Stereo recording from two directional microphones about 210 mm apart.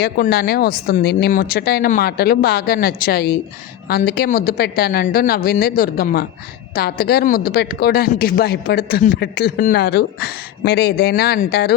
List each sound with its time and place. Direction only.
0.0 s speech: 50° left (ahead or behind)